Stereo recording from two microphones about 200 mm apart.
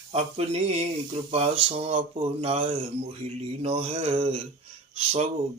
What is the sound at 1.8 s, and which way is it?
Mantra, 30° right (ahead or behind).